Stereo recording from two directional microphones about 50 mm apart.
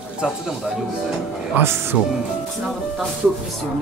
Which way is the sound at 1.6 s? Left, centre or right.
Right.